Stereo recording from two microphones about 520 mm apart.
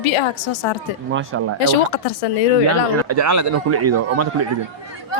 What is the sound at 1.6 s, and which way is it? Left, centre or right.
Speech, left.